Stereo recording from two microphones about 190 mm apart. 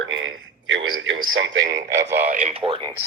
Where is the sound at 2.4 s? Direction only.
30° right (ahead or behind).